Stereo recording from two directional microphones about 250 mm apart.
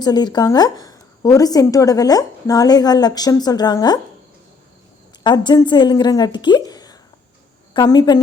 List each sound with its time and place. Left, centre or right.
0.0 s a woman's voice: centre
5.2 s a woman's voice: centre